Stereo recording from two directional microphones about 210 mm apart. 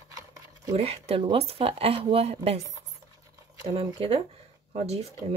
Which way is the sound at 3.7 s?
25° right (ahead or behind).